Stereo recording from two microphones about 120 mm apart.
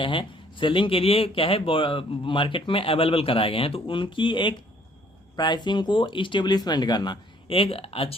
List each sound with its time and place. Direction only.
0.0 s speech: 45° left (ahead or behind)